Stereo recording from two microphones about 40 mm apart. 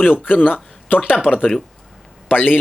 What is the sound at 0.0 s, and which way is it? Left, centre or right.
Speech, left.